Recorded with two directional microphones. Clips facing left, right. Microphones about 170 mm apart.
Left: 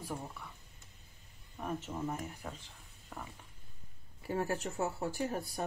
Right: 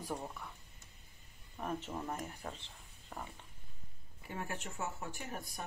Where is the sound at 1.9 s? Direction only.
Centre (ahead or behind).